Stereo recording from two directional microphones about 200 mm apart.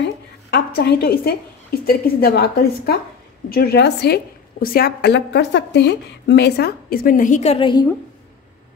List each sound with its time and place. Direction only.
0.0 s a woman's voice: 55° left (ahead or behind); by 7.9 s 20° left (ahead or behind)